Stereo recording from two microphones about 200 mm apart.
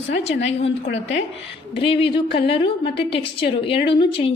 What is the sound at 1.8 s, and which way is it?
A woman's voice, 25° left (ahead or behind).